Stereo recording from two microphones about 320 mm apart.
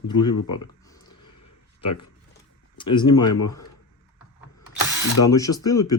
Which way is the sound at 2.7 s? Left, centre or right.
Centre.